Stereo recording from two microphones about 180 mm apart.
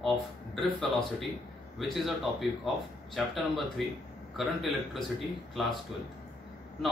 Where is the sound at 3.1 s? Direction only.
Centre (ahead or behind).